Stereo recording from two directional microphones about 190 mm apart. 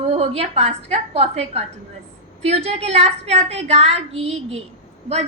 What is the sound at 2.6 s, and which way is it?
A woman's voice, 35° right (ahead or behind).